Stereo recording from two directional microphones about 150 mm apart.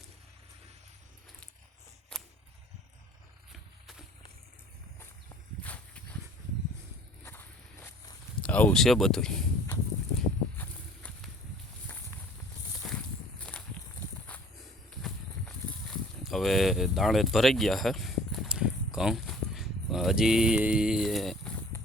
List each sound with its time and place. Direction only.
2.1 s a sound: 5° left (ahead or behind)
5.6 s livestock: 10° left (ahead or behind)
7.3 s walk: 15° left (ahead or behind)
8.4 s speech: 10° left (ahead or behind)
10.2 s walk: 5° left (ahead or behind)
12.8 s walk: centre (ahead or behind)
15.0 s livestock: 5° left (ahead or behind)